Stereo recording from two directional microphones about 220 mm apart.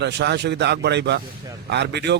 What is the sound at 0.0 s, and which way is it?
Speech, 50° right (ahead or behind).